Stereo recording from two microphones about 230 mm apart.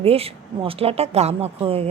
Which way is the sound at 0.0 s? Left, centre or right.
Right.